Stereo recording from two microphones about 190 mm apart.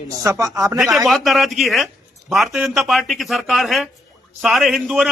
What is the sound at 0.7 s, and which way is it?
A man's voice, centre (ahead or behind).